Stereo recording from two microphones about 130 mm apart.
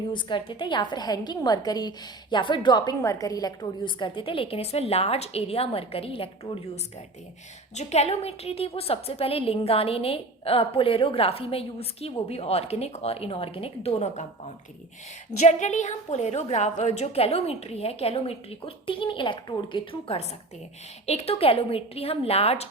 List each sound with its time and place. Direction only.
0.1 s a woman's voice: 40° left (ahead or behind)
7.8 s a woman's voice: 55° left (ahead or behind)